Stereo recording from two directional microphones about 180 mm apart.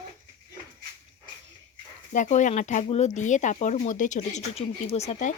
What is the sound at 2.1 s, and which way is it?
Speech, 45° left (ahead or behind).